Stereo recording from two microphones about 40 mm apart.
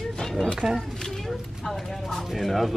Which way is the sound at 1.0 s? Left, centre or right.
Centre.